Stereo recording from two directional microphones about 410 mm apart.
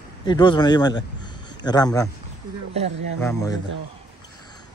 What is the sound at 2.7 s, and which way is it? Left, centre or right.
Speech, centre.